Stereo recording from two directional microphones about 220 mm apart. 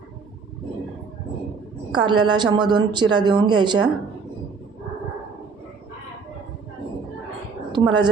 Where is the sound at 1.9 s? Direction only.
20° right (ahead or behind).